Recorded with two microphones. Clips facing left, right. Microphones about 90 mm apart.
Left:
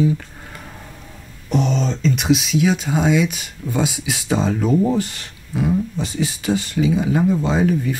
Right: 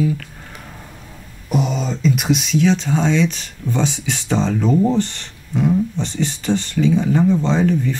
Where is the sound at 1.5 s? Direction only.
10° right (ahead or behind).